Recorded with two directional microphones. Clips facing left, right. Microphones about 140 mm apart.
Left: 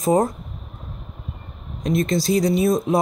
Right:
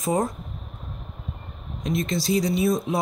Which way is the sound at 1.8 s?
45° left (ahead or behind).